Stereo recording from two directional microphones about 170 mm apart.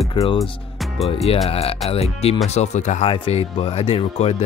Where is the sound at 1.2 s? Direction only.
35° left (ahead or behind).